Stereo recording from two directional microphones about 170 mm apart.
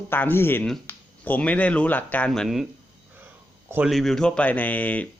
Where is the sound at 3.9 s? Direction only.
Centre (ahead or behind).